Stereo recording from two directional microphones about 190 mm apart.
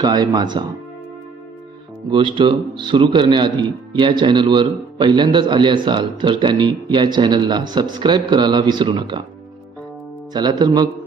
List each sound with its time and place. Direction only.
0.0 s a man's voice: 20° right (ahead or behind)
2.0 s a man's voice: 25° right (ahead or behind)
10.3 s a man's voice: 20° right (ahead or behind)